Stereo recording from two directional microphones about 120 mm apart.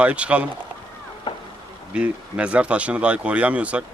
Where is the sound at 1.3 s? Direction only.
40° left (ahead or behind).